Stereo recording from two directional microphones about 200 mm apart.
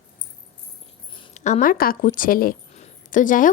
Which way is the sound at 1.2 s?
35° left (ahead or behind).